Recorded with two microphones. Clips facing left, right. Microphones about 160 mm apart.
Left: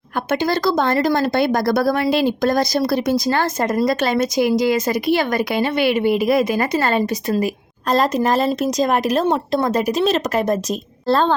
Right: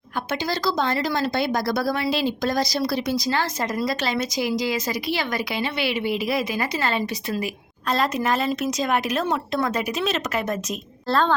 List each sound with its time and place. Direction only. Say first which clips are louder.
0.3 s speech: left 7 dB; 50° left (ahead or behind); by 11.3 s 30° left (ahead or behind)